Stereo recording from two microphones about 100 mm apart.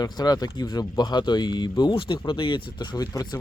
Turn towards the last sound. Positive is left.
turn(degrees=45)  # may be behind; listen again after turning